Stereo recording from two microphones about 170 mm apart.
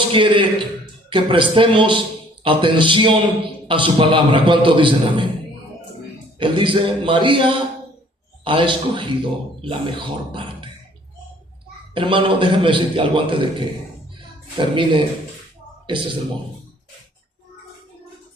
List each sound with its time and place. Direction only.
0.1 s a man's voice: 30° right (ahead or behind)
6.4 s a man's voice: 30° right (ahead or behind)
11.9 s a man's voice: 30° right (ahead or behind)